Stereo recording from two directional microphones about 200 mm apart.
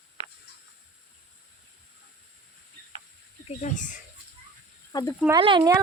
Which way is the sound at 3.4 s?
35° left (ahead or behind).